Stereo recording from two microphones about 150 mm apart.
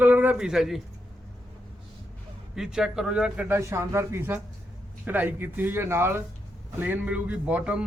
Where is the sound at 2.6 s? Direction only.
5° right (ahead or behind).